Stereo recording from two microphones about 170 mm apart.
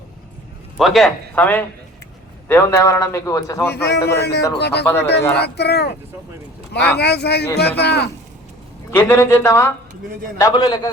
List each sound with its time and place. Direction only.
0.8 s a man's voice: centre (ahead or behind)
4.2 s a man's voice: 75° left (ahead or behind)
8.9 s a man's voice: 15° left (ahead or behind)